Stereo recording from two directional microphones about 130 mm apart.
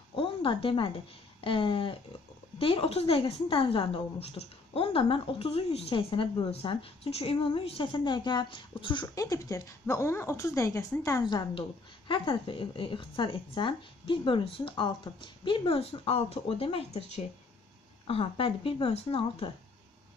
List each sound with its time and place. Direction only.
0.1 s a sound: 45° left (ahead or behind)
1.4 s a woman's voice: 40° left (ahead or behind)
9.0 s a woman's voice: 25° left (ahead or behind); by 19.5 s 45° left (ahead or behind)